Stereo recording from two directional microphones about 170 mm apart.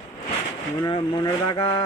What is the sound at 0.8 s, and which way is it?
Speech, 25° left (ahead or behind).